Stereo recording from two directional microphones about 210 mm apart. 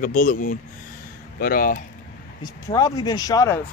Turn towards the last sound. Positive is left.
turn(degrees=15)  # may be behind; listen again after turning